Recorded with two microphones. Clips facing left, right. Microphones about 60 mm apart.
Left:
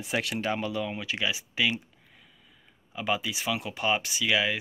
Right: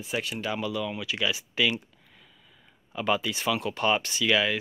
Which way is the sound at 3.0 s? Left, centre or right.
Centre.